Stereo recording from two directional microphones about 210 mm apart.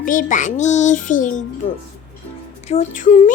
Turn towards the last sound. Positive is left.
turn(degrees=35)  # may be behind; listen again after turning